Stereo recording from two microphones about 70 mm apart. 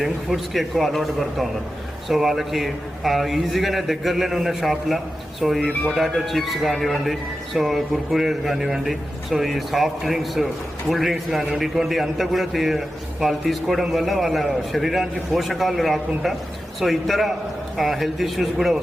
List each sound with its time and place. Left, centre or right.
0.0 s a man's voice: centre
5.5 s speech: centre
6.0 s a man's voice: centre